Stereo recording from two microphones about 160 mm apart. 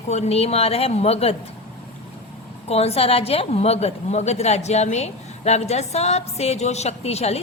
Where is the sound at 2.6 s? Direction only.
40° left (ahead or behind).